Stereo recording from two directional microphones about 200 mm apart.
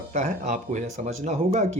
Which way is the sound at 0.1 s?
35° right (ahead or behind).